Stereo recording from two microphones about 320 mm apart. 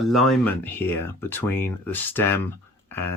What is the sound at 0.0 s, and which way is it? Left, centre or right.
Speech, centre.